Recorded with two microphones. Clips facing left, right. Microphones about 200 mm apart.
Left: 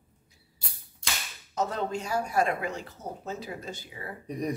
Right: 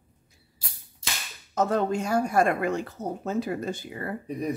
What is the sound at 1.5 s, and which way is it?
Speech, 50° right (ahead or behind).